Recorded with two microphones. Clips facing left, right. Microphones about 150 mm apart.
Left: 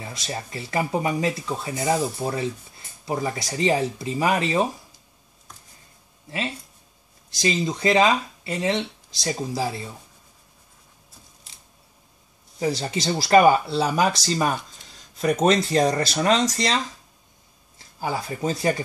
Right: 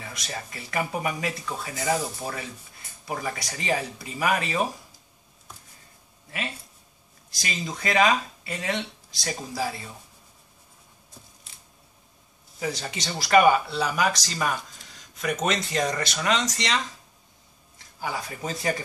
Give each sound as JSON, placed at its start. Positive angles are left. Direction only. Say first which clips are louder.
{"t": 0.0, "sound": "speech", "louder": "left 4 dB", "side_deg": 30}
{"t": 7.3, "sound": "speech", "louder": "left 9 dB", "side_deg": 25}
{"t": 12.5, "sound": "speech", "louder": "left 6 dB", "side_deg": 30}
{"t": 18.0, "sound": "speech", "louder": "left 6 dB", "side_deg": 30}